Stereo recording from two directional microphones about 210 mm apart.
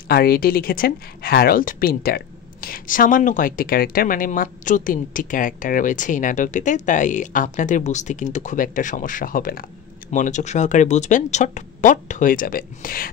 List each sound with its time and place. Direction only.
0.1 s speech: 45° left (ahead or behind)